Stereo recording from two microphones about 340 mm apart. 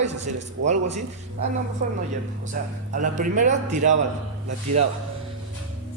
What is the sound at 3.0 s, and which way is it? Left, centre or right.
Speech, right.